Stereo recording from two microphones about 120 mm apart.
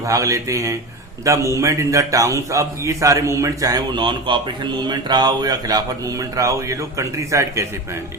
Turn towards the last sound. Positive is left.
turn(degrees=-25)  # may be behind; listen again after turning